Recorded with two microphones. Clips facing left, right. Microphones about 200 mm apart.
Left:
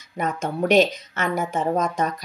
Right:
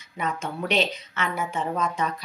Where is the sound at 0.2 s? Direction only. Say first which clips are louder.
Left 5 dB; 45° left (ahead or behind).